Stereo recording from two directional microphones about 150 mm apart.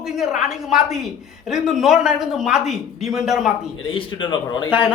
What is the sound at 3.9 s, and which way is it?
Speech, 35° left (ahead or behind).